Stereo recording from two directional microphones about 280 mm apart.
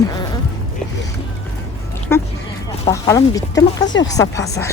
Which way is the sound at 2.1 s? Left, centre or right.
Centre.